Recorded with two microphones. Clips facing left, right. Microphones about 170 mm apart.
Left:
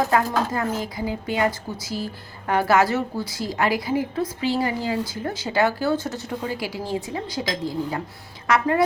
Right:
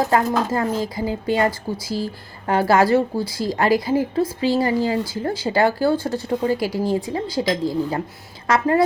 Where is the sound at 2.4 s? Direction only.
30° right (ahead or behind).